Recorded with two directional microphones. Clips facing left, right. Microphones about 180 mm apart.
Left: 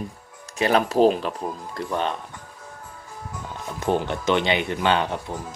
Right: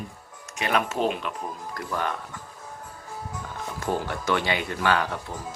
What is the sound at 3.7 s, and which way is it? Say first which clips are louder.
Speech: left 5 dB; 20° left (ahead or behind).